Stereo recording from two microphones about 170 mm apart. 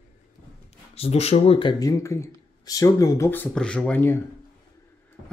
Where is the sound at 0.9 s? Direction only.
35° left (ahead or behind); by 4.2 s 10° left (ahead or behind).